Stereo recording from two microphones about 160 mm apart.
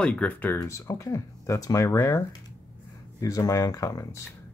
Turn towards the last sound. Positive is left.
turn(degrees=20)  # may be behind; listen again after turning